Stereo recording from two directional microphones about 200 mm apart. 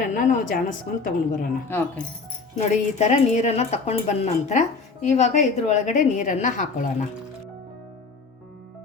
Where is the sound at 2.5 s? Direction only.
35° left (ahead or behind).